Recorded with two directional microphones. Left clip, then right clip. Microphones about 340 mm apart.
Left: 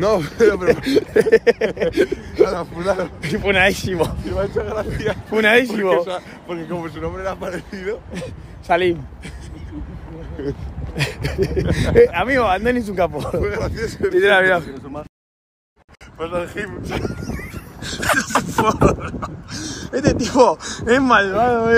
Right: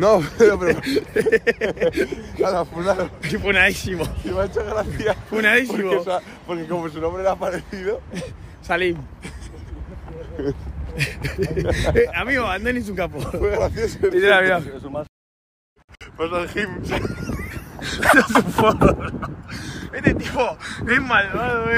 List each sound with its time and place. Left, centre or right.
0.0 s speech: centre
0.8 s speech: centre
2.4 s a man's voice: centre
5.4 s speech: centre
5.9 s a man's voice: centre
10.4 s speech: centre
11.0 s speech: centre
13.4 s speech: centre
14.1 s a man's voice: centre
16.2 s speech: right
17.4 s a man's voice: centre
19.5 s speech: centre
20.6 s speech: centre